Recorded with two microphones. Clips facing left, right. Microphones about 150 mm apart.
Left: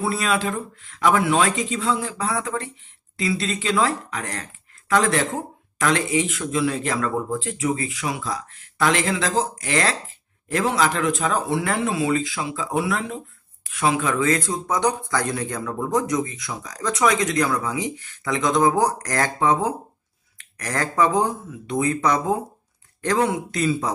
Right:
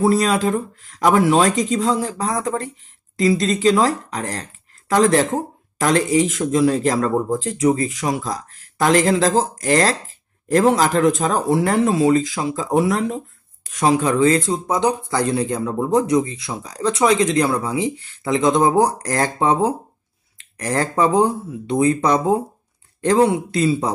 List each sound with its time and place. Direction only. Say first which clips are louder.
0.0 s speech: right 6 dB; 40° right (ahead or behind)